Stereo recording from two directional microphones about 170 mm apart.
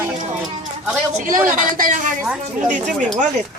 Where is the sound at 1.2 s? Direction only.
55° right (ahead or behind).